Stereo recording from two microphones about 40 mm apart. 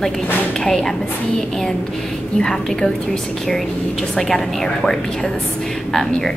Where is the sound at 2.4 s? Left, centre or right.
Centre.